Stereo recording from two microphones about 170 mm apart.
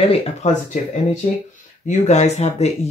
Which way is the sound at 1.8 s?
40° left (ahead or behind).